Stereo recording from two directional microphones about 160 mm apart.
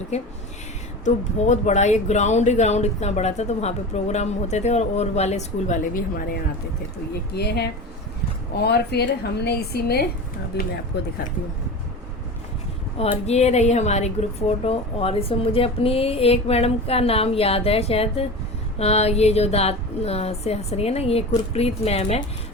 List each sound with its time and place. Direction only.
1.0 s speech: 50° left (ahead or behind)
7.3 s a woman's voice: 90° left
13.0 s a woman's voice: 45° left (ahead or behind)